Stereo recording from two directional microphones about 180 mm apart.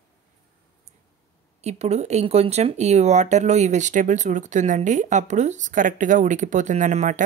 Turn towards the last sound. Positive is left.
turn(degrees=-45)  # may be behind; listen again after turning